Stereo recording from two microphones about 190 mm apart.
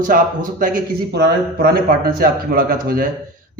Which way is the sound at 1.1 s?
60° right (ahead or behind).